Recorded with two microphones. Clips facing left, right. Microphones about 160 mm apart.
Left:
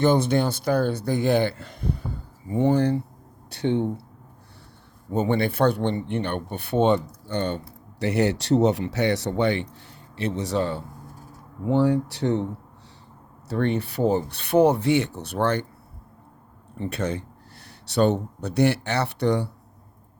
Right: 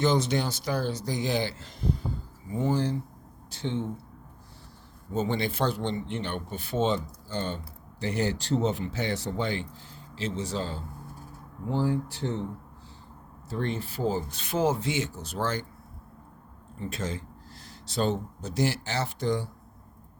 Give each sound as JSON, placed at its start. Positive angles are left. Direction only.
{"t": 0.0, "sound": "speech", "side_deg": 55}
{"t": 5.1, "sound": "speech", "side_deg": 60}
{"t": 13.5, "sound": "speech", "side_deg": 70}
{"t": 16.7, "sound": "speech", "side_deg": 65}